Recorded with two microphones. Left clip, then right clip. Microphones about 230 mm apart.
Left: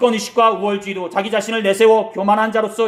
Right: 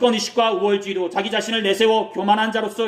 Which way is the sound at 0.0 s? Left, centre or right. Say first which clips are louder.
Left 4 dB; centre.